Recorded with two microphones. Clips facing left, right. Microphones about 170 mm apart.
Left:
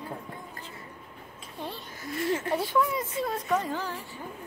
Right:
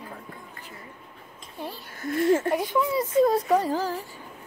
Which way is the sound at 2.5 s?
20° right (ahead or behind).